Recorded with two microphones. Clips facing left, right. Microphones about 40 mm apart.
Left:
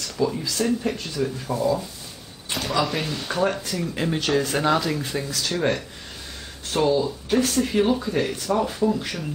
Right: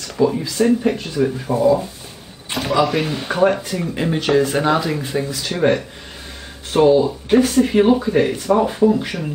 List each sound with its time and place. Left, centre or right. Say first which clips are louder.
0.2 s speech: right 7 dB; centre
2.5 s a sound: right 6 dB; centre
3.1 s speech: right 7 dB; right
3.9 s speech: right 6 dB; centre